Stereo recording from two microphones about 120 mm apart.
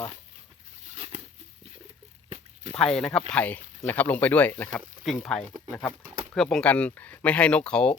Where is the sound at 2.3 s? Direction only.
65° right (ahead or behind).